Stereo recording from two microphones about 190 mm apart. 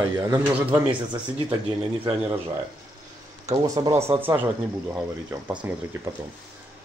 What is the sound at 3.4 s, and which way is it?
Speech, 15° right (ahead or behind).